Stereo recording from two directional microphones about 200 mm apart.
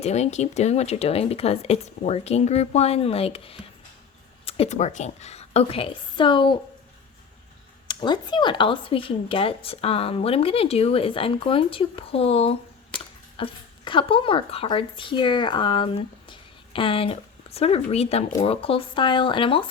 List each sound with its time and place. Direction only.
0.0 s speech: 35° left (ahead or behind)
7.9 s speech: 20° left (ahead or behind)